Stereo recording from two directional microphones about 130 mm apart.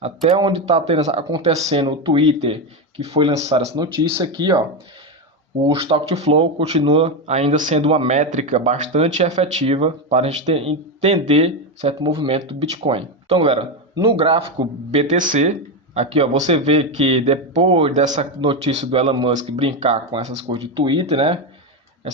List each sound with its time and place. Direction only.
0.5 s speech: 50° right (ahead or behind)
3.3 s speech: 55° right (ahead or behind)
3.8 s speech: 35° right (ahead or behind)
5.6 s speech: 50° right (ahead or behind); by 7.8 s 70° right (ahead or behind)
7.8 s speech: 50° right (ahead or behind)
12.0 s speech: 40° right (ahead or behind)
13.9 s speech: 40° right (ahead or behind)
14.8 s speech: 65° right (ahead or behind)
16.0 s speech: 55° right (ahead or behind)
18.0 s a man's voice: 70° right (ahead or behind)
18.6 s speech: 55° right (ahead or behind)
20.4 s speech: 40° right (ahead or behind)